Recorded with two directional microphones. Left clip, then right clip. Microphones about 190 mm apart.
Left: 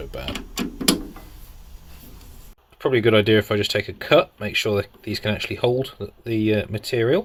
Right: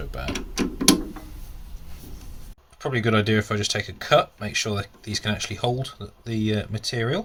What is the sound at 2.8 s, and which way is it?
Speech, 45° left (ahead or behind).